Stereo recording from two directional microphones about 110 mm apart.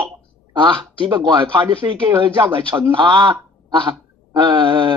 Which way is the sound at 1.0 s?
45° right (ahead or behind).